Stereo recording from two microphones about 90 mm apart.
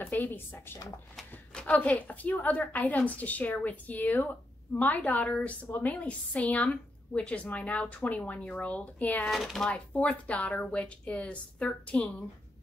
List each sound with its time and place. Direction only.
0.0 s a woman's voice: 20° left (ahead or behind)
9.3 s speech: centre (ahead or behind)
9.7 s a woman's voice: 15° left (ahead or behind)